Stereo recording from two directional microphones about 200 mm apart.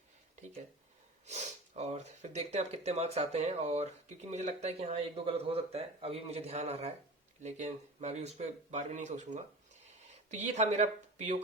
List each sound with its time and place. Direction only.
1.3 s speech: 35° right (ahead or behind)